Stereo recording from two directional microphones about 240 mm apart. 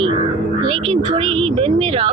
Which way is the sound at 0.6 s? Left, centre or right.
Centre.